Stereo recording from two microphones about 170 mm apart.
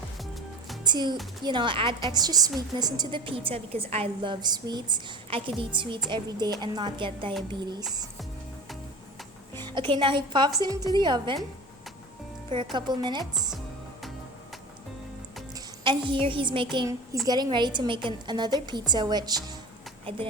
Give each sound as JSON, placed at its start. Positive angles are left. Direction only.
{"t": 0.9, "sound": "a woman's voice", "side_deg": -25}
{"t": 9.6, "sound": "a woman's voice", "side_deg": -30}
{"t": 12.7, "sound": "a woman's voice", "side_deg": -25}
{"t": 15.5, "sound": "a woman's voice", "side_deg": -30}